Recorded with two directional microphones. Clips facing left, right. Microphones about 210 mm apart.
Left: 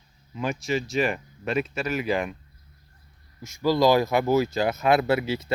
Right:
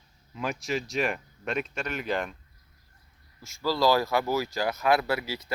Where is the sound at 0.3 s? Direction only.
Centre (ahead or behind).